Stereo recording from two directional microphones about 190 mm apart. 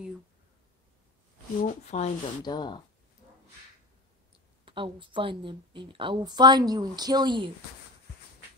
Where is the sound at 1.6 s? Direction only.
40° left (ahead or behind).